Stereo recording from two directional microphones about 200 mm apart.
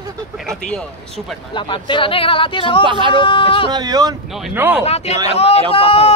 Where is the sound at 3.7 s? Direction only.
20° right (ahead or behind).